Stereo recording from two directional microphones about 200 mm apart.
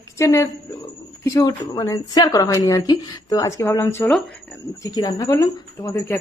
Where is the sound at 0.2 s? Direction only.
15° left (ahead or behind).